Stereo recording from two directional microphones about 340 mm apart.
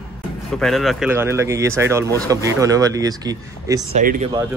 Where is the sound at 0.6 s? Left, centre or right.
Centre.